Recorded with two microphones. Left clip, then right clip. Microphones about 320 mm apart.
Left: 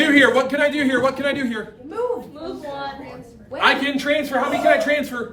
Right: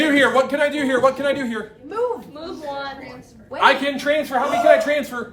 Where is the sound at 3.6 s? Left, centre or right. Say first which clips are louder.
Right 2 dB; centre.